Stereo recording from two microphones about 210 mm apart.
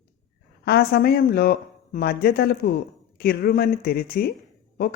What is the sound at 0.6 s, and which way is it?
Speech, 45° left (ahead or behind).